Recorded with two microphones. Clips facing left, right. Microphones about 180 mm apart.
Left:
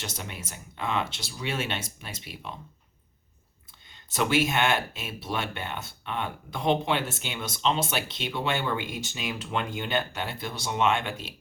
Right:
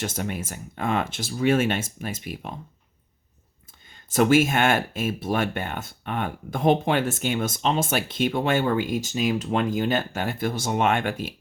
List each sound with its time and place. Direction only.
0.0 s speech: 50° right (ahead or behind)
4.1 s speech: 45° right (ahead or behind)